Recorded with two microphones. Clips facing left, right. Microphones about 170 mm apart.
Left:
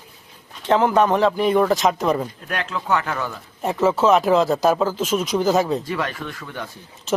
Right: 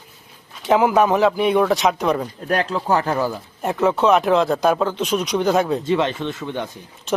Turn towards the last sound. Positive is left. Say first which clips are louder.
# right 6 dB
turn(degrees=-20)  # may be behind; listen again after turning